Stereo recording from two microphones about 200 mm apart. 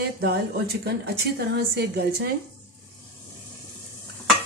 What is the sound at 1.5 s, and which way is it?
Speech, 50° right (ahead or behind).